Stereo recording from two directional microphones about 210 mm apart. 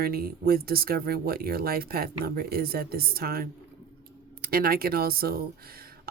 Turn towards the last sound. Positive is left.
turn(degrees=-45)  # may be behind; listen again after turning